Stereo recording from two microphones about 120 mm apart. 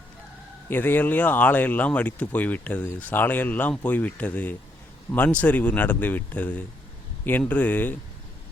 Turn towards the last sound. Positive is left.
turn(degrees=15)  # may be behind; listen again after turning